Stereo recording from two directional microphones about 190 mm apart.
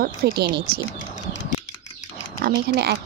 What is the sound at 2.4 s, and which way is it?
Speech, 60° right (ahead or behind).